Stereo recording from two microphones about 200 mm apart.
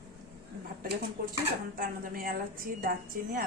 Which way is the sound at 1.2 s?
45° right (ahead or behind).